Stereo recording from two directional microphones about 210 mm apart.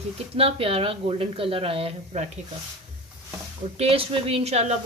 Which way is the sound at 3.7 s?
25° right (ahead or behind).